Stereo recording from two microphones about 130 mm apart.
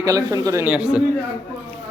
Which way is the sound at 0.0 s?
25° right (ahead or behind).